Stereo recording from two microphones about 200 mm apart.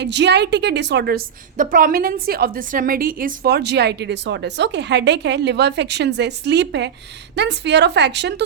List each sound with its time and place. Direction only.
0.0 s a woman's voice: 60° right (ahead or behind)